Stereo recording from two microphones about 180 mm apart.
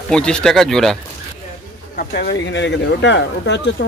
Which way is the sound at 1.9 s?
65° left (ahead or behind).